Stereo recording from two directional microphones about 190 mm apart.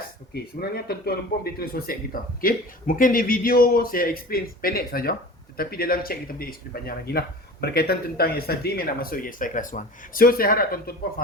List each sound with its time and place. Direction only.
0.3 s speech: 55° left (ahead or behind)